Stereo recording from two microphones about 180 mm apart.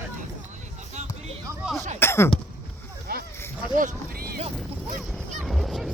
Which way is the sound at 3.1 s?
60° right (ahead or behind).